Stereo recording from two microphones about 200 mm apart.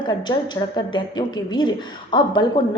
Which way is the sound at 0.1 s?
20° left (ahead or behind).